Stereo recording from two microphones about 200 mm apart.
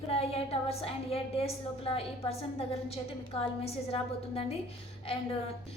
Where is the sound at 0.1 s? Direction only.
30° left (ahead or behind).